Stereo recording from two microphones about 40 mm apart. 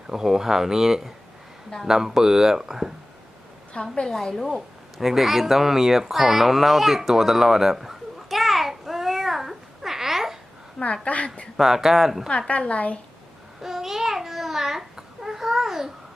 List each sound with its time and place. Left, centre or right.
0.1 s speech: centre
4.0 s a woman's voice: centre
4.9 s a sound: centre
11.0 s a woman's voice: left
11.5 s speech: centre
12.5 s a woman's voice: left
13.6 s babbling: centre